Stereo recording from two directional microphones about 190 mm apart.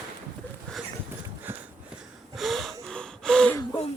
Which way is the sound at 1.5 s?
10° right (ahead or behind).